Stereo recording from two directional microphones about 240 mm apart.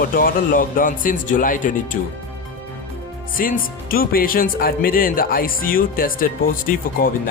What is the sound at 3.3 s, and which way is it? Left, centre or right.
Speech, left.